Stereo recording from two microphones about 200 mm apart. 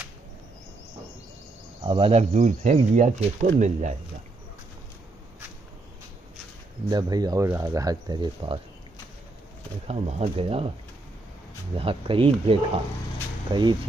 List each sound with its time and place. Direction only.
1.8 s speech: 25° right (ahead or behind)
6.9 s speech: 20° right (ahead or behind)
9.8 s speech: 30° right (ahead or behind)
11.7 s speech: 25° right (ahead or behind)